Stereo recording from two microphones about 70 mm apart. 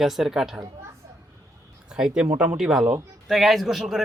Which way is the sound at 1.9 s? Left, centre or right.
Centre.